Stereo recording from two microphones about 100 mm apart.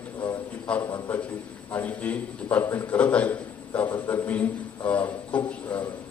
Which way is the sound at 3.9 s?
30° left (ahead or behind).